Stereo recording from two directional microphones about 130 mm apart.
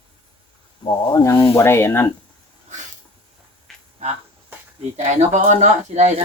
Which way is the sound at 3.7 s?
5° left (ahead or behind).